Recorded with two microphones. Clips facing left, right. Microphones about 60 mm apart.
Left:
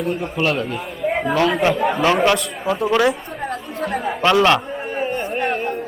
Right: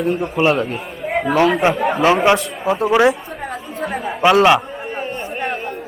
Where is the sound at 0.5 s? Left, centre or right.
Right.